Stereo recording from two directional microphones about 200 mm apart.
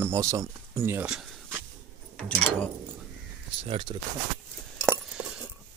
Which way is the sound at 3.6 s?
25° right (ahead or behind).